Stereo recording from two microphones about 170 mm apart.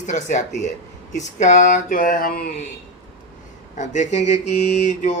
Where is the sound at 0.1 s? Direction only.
45° left (ahead or behind).